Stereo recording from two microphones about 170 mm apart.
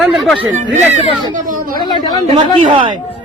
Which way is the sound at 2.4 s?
30° right (ahead or behind).